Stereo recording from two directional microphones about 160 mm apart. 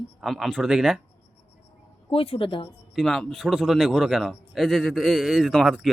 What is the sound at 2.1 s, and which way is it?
Speech, 35° left (ahead or behind).